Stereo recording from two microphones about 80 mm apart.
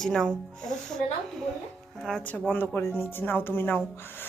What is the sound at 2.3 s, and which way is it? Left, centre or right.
Speech, centre.